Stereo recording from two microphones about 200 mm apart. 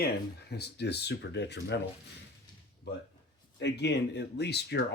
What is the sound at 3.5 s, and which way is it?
Speech, 60° left (ahead or behind).